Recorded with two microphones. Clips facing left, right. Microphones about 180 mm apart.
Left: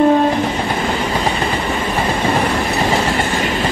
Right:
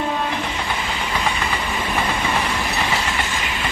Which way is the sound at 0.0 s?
40° left (ahead or behind).